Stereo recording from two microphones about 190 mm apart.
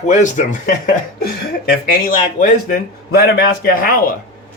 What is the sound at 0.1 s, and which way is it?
Speech, 40° left (ahead or behind).